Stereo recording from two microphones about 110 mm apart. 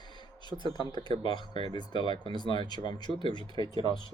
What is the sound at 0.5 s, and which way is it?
Speech, 45° right (ahead or behind).